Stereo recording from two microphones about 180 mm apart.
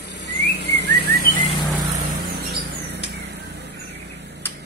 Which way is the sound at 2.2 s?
60° right (ahead or behind).